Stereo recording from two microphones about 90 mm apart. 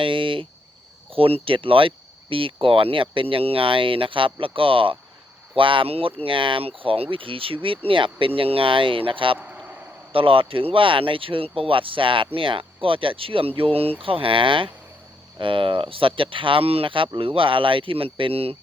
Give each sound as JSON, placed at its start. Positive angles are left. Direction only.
{"t": 0.0, "sound": "cricket", "side_deg": -70}
{"t": 1.1, "sound": "speech", "side_deg": -90}
{"t": 6.2, "sound": "speech", "side_deg": -70}
{"t": 9.4, "sound": "a sound", "side_deg": -15}
{"t": 10.1, "sound": "speech", "side_deg": -85}